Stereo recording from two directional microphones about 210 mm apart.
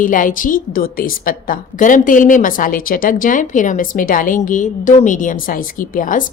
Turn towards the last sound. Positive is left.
turn(degrees=40)  # may be behind; listen again after turning